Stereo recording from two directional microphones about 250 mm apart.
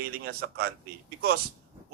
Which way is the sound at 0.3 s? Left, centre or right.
Right.